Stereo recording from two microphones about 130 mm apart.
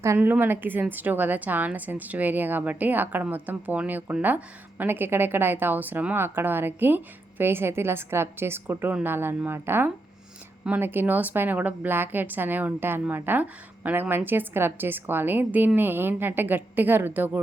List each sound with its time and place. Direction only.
0.0 s a woman's voice: 20° right (ahead or behind)